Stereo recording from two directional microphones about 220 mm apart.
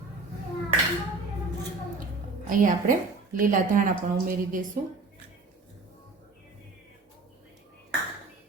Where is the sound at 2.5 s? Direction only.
35° right (ahead or behind).